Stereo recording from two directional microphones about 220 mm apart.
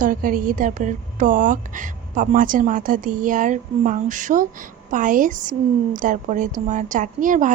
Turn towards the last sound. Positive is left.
turn(degrees=-35)  # may be behind; listen again after turning